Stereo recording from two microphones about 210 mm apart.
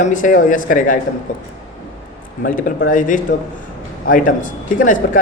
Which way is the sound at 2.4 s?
40° left (ahead or behind).